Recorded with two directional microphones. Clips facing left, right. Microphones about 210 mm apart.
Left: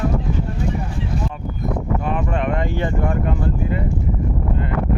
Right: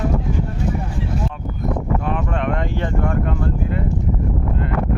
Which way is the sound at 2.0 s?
5° left (ahead or behind).